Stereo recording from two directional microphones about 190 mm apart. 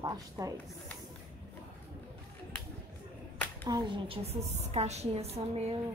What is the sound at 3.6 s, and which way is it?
A woman's voice, 25° right (ahead or behind).